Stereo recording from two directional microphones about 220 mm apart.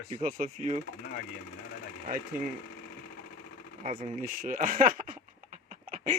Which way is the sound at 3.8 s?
30° right (ahead or behind).